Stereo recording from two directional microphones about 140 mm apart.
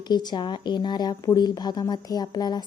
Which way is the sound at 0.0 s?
30° left (ahead or behind).